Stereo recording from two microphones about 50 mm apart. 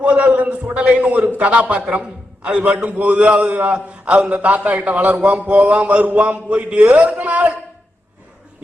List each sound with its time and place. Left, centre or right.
0.0 s a man's voice: right